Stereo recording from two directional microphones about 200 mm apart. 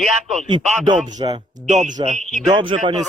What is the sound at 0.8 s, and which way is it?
Speech, 20° right (ahead or behind).